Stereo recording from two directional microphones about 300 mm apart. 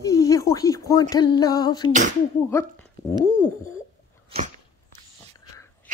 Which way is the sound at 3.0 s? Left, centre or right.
Centre.